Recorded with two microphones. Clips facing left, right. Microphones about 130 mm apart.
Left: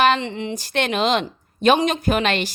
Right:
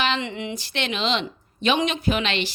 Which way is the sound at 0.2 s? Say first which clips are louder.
Left 3 dB; 35° left (ahead or behind).